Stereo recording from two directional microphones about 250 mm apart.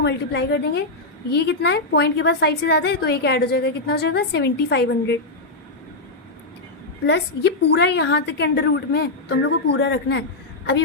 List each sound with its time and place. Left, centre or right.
0.0 s a woman's voice: left
7.1 s a woman's voice: left